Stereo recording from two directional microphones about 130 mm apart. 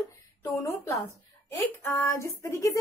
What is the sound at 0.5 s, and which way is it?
A woman's voice, 25° left (ahead or behind).